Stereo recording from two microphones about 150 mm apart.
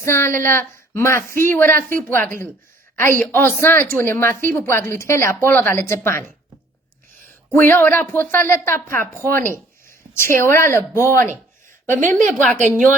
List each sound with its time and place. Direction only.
0.0 s a woman's voice: 15° left (ahead or behind)
7.5 s a woman's voice: 15° left (ahead or behind)
12.3 s a woman's voice: 5° left (ahead or behind)